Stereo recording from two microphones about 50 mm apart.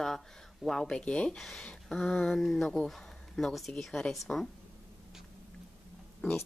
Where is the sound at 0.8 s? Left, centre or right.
Centre.